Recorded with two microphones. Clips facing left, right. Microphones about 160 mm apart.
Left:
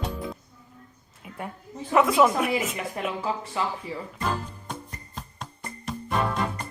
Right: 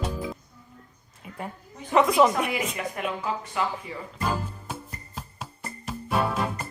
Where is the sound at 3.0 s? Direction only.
30° left (ahead or behind).